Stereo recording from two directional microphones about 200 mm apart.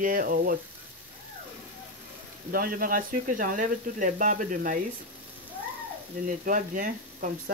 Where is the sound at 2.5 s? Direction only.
45° right (ahead or behind).